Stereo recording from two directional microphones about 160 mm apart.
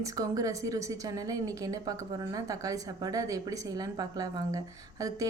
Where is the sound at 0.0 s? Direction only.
20° right (ahead or behind).